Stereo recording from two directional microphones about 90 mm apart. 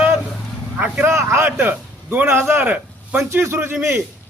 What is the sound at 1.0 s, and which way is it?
A man's voice, 25° right (ahead or behind).